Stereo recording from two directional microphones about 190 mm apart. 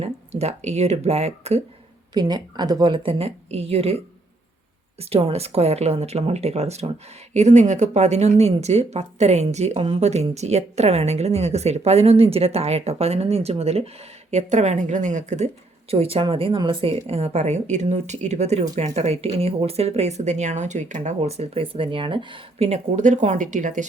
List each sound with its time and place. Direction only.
0.0 s speech: 35° right (ahead or behind)
2.1 s a woman's voice: 20° right (ahead or behind); by 23.8 s 40° right (ahead or behind)